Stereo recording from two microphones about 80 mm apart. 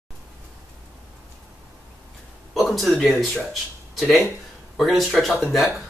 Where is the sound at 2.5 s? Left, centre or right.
Centre.